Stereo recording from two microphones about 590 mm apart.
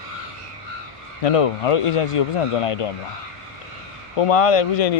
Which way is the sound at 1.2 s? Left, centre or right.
Left.